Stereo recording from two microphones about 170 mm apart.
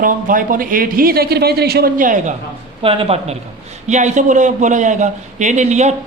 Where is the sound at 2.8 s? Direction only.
35° right (ahead or behind).